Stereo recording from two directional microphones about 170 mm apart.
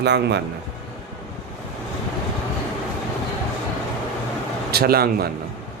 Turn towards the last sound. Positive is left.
turn(degrees=-65)  # may be behind; listen again after turning